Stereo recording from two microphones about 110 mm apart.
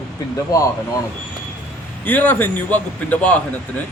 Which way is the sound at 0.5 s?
30° left (ahead or behind).